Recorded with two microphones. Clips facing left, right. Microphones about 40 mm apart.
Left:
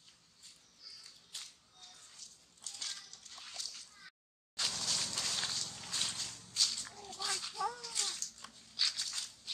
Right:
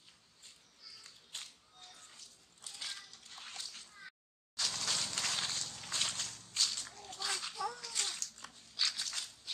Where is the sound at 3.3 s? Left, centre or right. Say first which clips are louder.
Even; right.